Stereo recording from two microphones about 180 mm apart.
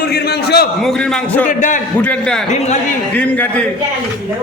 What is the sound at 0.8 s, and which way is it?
Speech, centre (ahead or behind).